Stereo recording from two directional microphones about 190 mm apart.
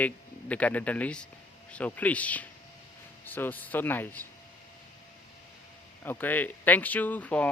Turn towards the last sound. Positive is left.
turn(degrees=10)  # may be behind; listen again after turning